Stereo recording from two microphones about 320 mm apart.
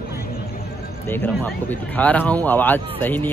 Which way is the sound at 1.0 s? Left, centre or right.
Centre.